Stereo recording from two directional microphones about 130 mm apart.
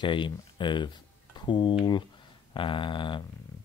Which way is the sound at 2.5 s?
40° left (ahead or behind).